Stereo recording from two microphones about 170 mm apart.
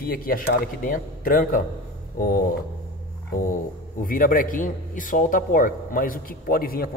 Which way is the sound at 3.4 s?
55° left (ahead or behind).